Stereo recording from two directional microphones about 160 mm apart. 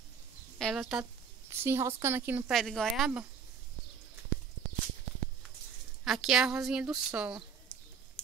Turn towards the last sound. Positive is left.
turn(degrees=5)  # may be behind; listen again after turning